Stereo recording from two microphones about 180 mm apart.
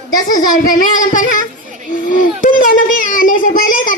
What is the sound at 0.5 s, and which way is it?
A child's voice, 50° left (ahead or behind).